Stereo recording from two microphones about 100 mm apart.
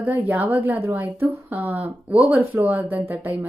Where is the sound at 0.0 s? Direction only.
20° right (ahead or behind).